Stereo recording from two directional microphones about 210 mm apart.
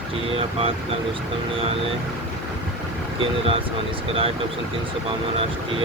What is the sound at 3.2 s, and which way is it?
Speech, 25° right (ahead or behind).